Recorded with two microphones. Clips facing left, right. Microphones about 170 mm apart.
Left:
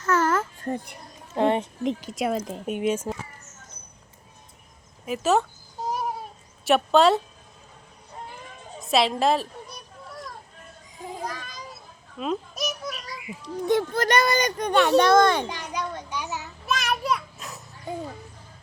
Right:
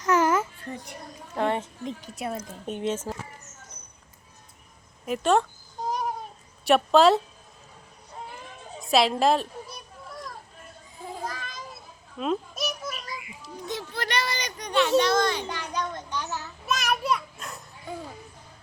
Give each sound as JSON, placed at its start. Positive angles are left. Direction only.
{"t": 0.0, "sound": "babbling", "side_deg": -15}
{"t": 0.6, "sound": "a child's voice", "side_deg": 50}
{"t": 1.4, "sound": "speech", "side_deg": 20}
{"t": 1.8, "sound": "a woman's voice", "side_deg": 85}
{"t": 2.6, "sound": "speech", "side_deg": 10}
{"t": 5.0, "sound": "speech", "side_deg": 5}
{"t": 5.9, "sound": "cat", "side_deg": 5}
{"t": 6.7, "sound": "speech", "side_deg": 0}
{"t": 8.1, "sound": "a sound", "side_deg": 0}
{"t": 11.2, "sound": "children playing", "side_deg": 0}
{"t": 13.7, "sound": "a child's voice", "side_deg": 50}
{"t": 15.4, "sound": "a sound", "side_deg": 10}
{"t": 16.6, "sound": "children playing", "side_deg": 0}